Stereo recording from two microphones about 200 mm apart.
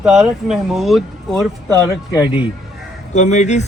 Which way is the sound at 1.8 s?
20° left (ahead or behind).